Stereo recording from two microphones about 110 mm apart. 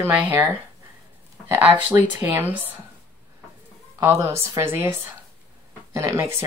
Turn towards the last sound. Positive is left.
turn(degrees=-25)  # may be behind; listen again after turning